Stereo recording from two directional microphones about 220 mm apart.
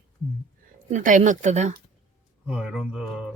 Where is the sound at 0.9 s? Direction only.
35° right (ahead or behind).